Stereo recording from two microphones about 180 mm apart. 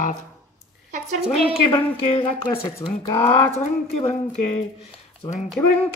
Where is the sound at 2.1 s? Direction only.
30° left (ahead or behind).